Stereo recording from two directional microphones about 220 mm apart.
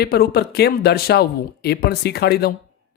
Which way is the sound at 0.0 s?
45° left (ahead or behind).